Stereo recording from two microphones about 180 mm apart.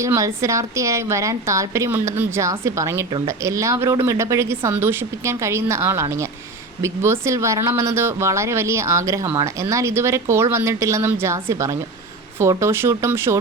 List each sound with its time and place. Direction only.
0.0 s a woman's voice: 15° right (ahead or behind)